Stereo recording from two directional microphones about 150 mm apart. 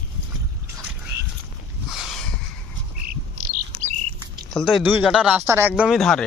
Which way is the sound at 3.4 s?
60° right (ahead or behind).